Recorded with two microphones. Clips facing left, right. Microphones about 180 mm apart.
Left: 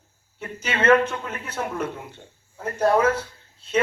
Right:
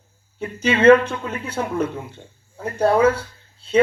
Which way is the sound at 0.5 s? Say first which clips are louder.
Right 6 dB; 30° right (ahead or behind).